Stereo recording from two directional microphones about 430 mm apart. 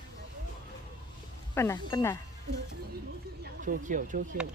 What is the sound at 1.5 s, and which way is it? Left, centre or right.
Speech, centre.